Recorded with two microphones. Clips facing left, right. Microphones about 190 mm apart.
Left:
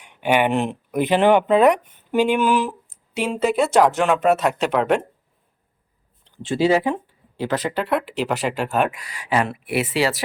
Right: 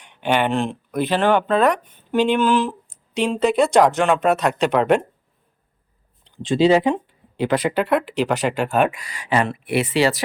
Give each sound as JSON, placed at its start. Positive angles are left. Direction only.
{"t": 0.0, "sound": "speech", "side_deg": 10}
{"t": 6.3, "sound": "speech", "side_deg": -15}
{"t": 7.9, "sound": "speech", "side_deg": 0}